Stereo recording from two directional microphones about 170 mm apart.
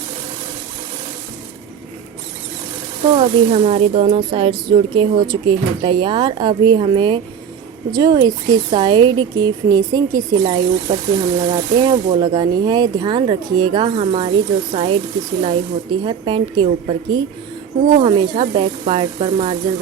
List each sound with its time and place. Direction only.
3.1 s a woman's voice: 30° right (ahead or behind)